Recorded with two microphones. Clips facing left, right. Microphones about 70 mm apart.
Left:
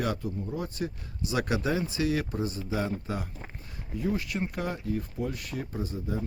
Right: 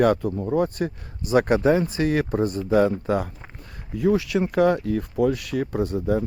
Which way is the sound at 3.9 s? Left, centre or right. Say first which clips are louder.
Right 10 dB; right.